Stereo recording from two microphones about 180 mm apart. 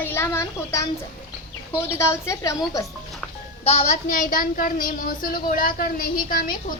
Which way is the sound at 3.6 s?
35° left (ahead or behind).